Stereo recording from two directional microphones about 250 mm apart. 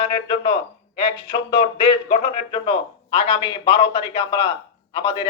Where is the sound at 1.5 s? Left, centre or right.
Centre.